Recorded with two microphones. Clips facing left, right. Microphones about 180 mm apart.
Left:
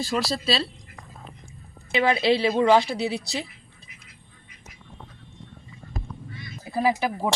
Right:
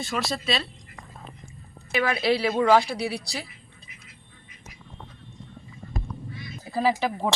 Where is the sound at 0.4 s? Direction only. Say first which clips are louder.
Left 3 dB; 35° left (ahead or behind).